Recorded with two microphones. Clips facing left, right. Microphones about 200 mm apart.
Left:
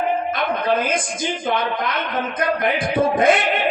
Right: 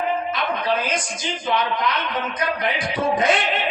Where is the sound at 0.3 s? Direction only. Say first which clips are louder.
Left 3 dB; 50° left (ahead or behind).